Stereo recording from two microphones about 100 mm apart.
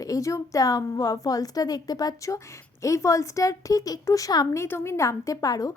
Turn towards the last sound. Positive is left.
turn(degrees=35)  # may be behind; listen again after turning